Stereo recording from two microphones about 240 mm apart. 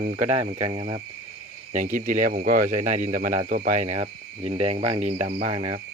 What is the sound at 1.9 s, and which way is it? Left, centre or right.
Speech, right.